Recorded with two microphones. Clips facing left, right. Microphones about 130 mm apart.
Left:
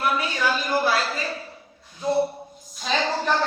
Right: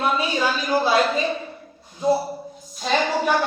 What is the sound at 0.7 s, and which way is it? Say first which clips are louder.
Speech: right 7 dB; 20° right (ahead or behind).